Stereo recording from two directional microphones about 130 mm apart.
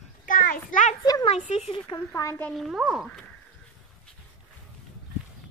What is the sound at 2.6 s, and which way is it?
Speech, centre (ahead or behind).